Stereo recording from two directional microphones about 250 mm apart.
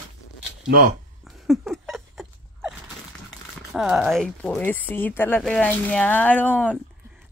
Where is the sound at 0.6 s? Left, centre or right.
Right.